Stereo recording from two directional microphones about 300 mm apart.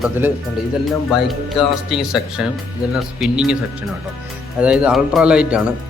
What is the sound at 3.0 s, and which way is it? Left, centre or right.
Speech, centre.